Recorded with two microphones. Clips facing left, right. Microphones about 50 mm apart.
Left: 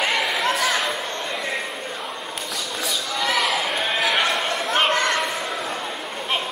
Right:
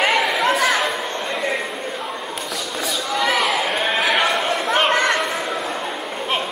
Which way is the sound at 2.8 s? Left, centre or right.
Centre.